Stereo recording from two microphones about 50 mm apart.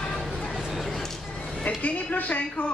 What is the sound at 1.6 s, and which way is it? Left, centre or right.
A woman's voice, left.